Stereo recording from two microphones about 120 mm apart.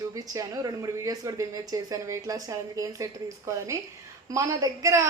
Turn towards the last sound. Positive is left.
turn(degrees=-25)  # may be behind; listen again after turning